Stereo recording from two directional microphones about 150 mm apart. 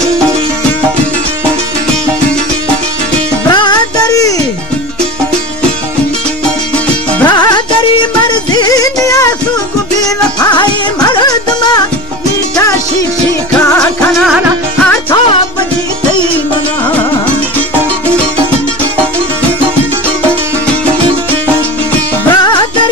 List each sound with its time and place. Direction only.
3.4 s music: 25° left (ahead or behind)
7.2 s music: 30° left (ahead or behind)
10.5 s music: 30° left (ahead or behind)
22.3 s music: 30° left (ahead or behind)